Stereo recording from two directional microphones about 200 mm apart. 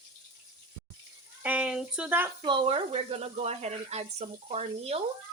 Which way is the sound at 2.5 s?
25° right (ahead or behind).